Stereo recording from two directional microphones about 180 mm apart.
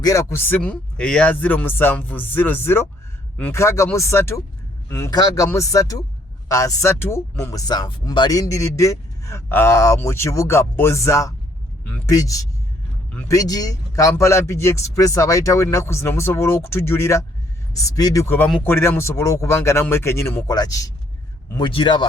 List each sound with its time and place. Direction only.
0.0 s speech: 15° left (ahead or behind)